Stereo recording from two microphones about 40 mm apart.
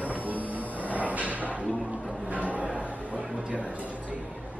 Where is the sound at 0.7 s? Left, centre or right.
Right.